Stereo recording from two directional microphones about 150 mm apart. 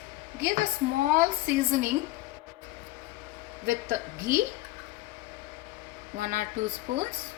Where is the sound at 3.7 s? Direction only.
75° right (ahead or behind).